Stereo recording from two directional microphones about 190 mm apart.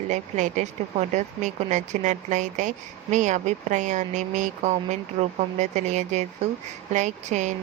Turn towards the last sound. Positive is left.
turn(degrees=-40)  # may be behind; listen again after turning